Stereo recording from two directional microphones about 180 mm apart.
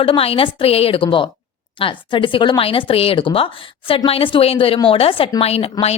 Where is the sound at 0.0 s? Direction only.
30° left (ahead or behind).